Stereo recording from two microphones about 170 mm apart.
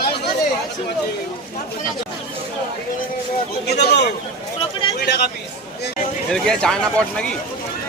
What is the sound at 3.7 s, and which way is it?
Speech, 75° left (ahead or behind).